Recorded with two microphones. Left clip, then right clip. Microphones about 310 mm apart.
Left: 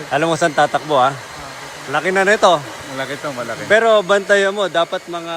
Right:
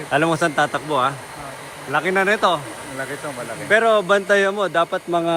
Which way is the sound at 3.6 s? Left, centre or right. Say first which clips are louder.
Left 3 dB; centre.